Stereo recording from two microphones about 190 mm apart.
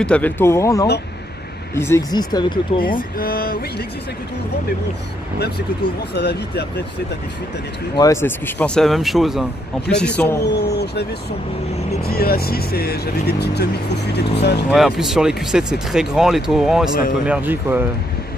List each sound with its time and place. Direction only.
0.0 s speech: 5° left (ahead or behind); by 2.8 s 20° left (ahead or behind)
3.0 s speech: 50° left (ahead or behind)
6.1 s speech: 60° left (ahead or behind)
7.9 s speech: 15° left (ahead or behind)
10.5 s speech: 60° left (ahead or behind)
14.7 s speech: centre (ahead or behind)